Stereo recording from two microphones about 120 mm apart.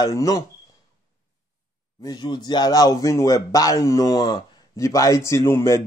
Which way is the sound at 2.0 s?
40° left (ahead or behind).